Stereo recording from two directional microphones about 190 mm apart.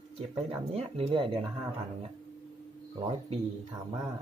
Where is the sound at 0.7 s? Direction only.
30° right (ahead or behind).